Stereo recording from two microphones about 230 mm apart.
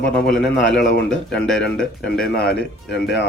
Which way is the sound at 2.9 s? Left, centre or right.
Left.